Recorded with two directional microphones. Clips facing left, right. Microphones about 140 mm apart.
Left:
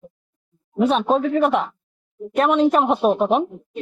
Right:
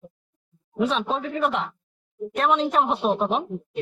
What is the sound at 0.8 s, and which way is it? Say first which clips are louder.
Speech: left 6 dB; 55° left (ahead or behind).